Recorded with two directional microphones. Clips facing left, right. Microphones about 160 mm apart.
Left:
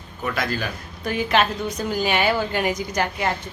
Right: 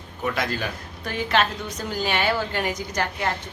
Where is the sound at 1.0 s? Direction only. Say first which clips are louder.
Left 3 dB; 15° left (ahead or behind).